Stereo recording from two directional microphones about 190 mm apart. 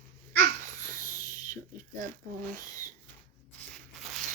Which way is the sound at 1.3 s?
40° right (ahead or behind).